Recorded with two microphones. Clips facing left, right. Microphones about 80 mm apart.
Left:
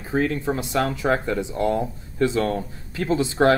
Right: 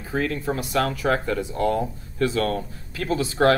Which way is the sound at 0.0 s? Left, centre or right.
Left.